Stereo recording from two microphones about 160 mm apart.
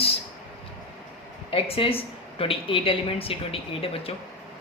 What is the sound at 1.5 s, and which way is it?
A woman's voice, 35° left (ahead or behind).